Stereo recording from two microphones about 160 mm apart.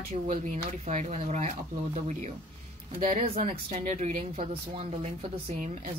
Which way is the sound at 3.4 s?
40° right (ahead or behind).